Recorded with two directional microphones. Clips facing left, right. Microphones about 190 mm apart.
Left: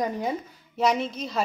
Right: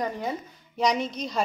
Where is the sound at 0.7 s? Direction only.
Centre (ahead or behind).